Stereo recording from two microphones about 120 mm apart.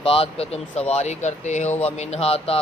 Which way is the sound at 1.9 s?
60° left (ahead or behind).